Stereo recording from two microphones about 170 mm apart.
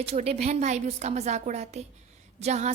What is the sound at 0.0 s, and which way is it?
A woman's voice, 35° right (ahead or behind).